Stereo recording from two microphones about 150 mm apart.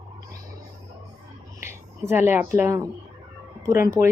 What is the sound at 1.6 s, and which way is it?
A woman's voice, 20° right (ahead or behind).